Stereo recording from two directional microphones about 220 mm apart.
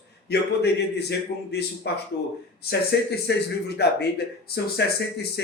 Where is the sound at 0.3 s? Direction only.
50° left (ahead or behind).